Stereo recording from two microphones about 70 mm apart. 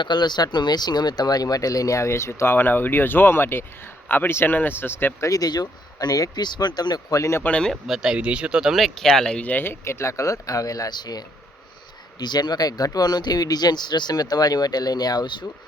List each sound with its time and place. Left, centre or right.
0.0 s speech: left
5.2 s speech: left
7.2 s speech: left
7.9 s speech: centre
9.0 s speech: centre
9.4 s speech: left
12.2 s speech: left